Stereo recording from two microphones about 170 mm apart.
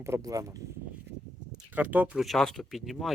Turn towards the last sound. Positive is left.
turn(degrees=0)  # may be behind; listen again after turning